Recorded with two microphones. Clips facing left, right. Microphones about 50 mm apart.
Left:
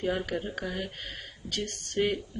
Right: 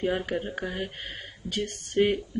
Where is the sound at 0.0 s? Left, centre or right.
Centre.